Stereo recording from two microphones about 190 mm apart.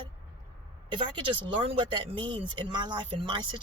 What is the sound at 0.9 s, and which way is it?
Speech, 25° right (ahead or behind).